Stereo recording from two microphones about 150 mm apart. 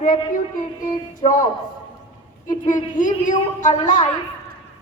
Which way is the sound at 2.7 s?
60° left (ahead or behind).